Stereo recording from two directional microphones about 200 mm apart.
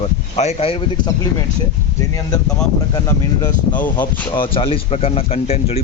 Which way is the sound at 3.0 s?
20° left (ahead or behind).